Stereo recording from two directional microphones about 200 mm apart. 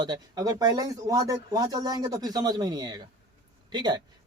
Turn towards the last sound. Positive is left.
turn(degrees=-20)  # may be behind; listen again after turning